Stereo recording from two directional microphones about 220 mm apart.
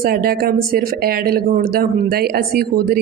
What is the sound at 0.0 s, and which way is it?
Speech, 45° right (ahead or behind).